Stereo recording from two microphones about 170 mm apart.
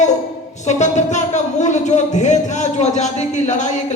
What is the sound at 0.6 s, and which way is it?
A man's voice, 45° left (ahead or behind).